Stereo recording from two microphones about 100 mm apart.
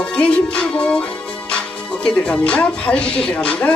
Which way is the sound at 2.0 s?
10° left (ahead or behind).